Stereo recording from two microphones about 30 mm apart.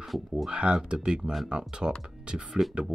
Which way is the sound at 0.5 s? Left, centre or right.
Right.